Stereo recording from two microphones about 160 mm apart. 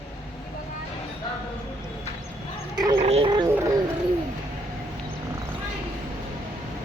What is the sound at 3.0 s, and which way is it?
Speech, 40° right (ahead or behind).